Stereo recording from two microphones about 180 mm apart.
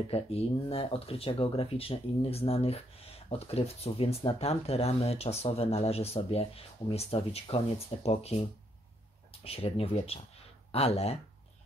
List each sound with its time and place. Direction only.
0.1 s speech: 35° left (ahead or behind)